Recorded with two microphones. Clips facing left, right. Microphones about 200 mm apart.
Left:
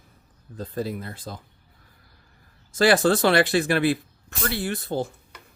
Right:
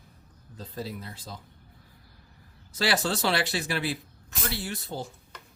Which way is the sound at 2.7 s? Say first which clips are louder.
Left 9 dB; 50° left (ahead or behind).